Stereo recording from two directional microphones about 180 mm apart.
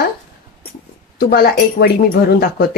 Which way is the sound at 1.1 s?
60° left (ahead or behind).